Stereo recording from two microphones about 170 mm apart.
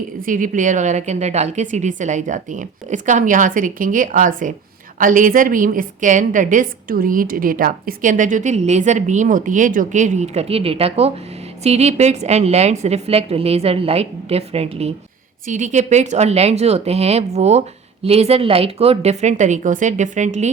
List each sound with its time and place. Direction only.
0.2 s a woman's voice: 55° right (ahead or behind)